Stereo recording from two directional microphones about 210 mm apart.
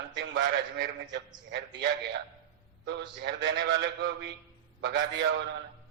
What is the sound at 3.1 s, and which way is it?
A man's voice, 55° right (ahead or behind).